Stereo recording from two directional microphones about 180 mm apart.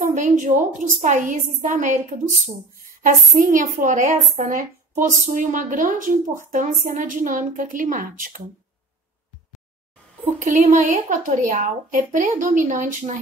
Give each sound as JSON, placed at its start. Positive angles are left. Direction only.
{"t": 0.0, "sound": "a woman's voice", "side_deg": -45}
{"t": 10.2, "sound": "a woman's voice", "side_deg": -40}